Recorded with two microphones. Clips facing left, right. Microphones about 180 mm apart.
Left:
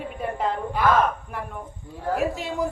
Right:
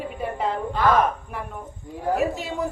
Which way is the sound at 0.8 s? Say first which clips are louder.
Right 1 dB; 10° left (ahead or behind).